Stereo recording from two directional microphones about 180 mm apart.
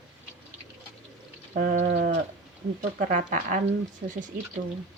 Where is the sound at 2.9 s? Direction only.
45° right (ahead or behind).